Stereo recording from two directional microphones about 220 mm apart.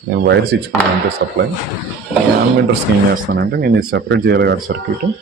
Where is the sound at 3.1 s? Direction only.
40° right (ahead or behind).